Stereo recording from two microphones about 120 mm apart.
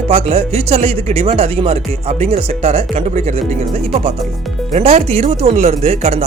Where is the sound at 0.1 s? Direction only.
55° right (ahead or behind).